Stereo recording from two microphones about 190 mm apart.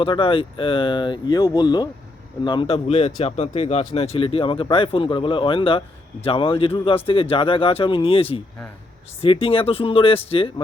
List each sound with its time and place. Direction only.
0.0 s speech: 25° left (ahead or behind)